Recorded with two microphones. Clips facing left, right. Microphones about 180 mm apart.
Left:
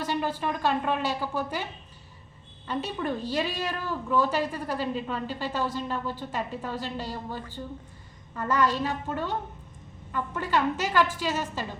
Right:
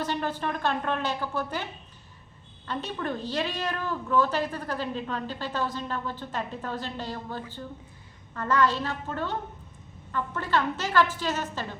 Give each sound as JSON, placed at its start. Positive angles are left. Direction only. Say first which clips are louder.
{"t": 0.0, "sound": "a woman's voice", "louder": "left 1 dB", "side_deg": 10}
{"t": 2.6, "sound": "a woman's voice", "louder": "left 2 dB", "side_deg": 10}